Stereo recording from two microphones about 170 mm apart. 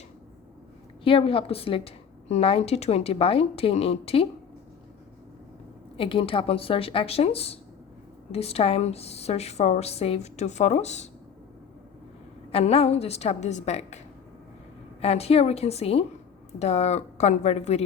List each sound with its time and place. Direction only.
1.0 s a woman's voice: 30° left (ahead or behind)
6.0 s a woman's voice: 30° left (ahead or behind)
12.5 s a woman's voice: 35° left (ahead or behind)
15.0 s a woman's voice: 35° left (ahead or behind)